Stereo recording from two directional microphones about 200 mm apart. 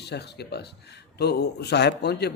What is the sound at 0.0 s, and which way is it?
Speech, 55° left (ahead or behind).